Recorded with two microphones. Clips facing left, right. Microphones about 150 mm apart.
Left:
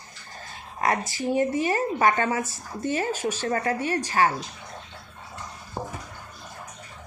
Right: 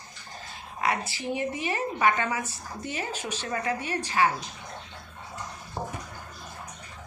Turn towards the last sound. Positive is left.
turn(degrees=20)  # may be behind; listen again after turning